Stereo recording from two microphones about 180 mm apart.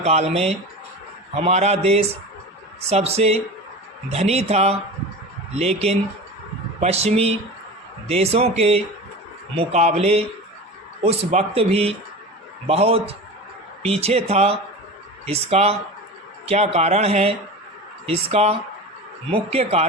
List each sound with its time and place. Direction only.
0.0 s speech: 35° right (ahead or behind)